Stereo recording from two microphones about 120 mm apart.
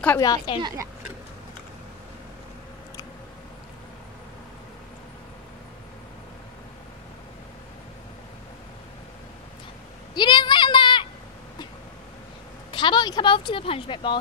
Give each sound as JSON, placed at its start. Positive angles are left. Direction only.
{"t": 0.2, "sound": "a woman's voice", "side_deg": 30}
{"t": 10.1, "sound": "a sound", "side_deg": 40}
{"t": 12.7, "sound": "speech", "side_deg": 40}